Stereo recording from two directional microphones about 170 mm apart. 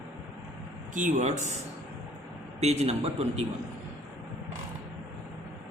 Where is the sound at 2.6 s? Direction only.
40° right (ahead or behind).